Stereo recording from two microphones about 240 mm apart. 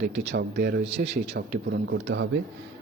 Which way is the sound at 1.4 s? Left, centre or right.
Right.